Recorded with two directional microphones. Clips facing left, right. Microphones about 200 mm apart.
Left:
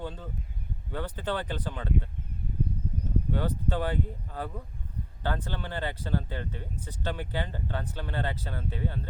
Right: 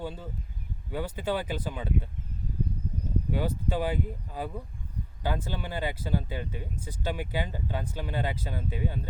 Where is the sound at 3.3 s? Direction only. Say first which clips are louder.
Right 1 dB; 10° right (ahead or behind).